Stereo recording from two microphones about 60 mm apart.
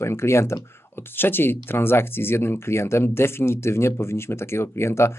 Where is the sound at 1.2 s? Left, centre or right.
Left.